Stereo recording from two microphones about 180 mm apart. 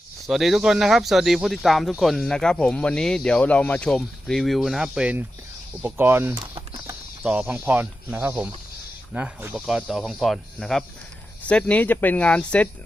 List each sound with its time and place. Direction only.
0.3 s speech: centre (ahead or behind)
6.3 s a sound: 25° right (ahead or behind)
7.2 s speech: 5° right (ahead or behind)